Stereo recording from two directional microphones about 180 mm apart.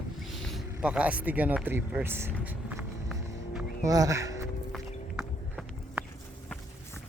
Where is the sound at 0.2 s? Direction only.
Centre (ahead or behind).